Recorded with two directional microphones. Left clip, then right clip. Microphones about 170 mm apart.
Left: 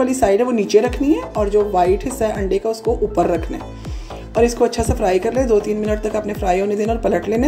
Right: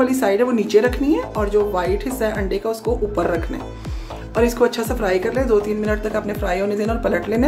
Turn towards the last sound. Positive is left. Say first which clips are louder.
# left 2 dB
turn(degrees=15)  # may be behind; listen again after turning